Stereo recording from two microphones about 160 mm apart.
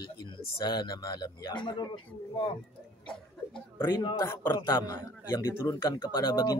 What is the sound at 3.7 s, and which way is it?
A man's voice, 20° left (ahead or behind).